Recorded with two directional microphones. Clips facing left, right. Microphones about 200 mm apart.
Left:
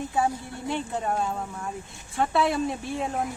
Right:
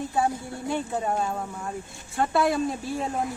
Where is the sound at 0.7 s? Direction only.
5° right (ahead or behind).